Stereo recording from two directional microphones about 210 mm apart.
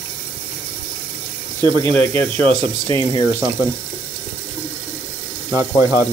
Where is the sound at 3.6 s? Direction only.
10° right (ahead or behind).